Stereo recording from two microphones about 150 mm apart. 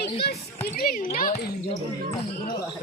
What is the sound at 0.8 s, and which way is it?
Speech, 65° left (ahead or behind).